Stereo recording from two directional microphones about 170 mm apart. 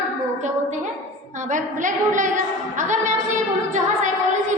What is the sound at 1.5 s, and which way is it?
A woman's voice, 50° right (ahead or behind).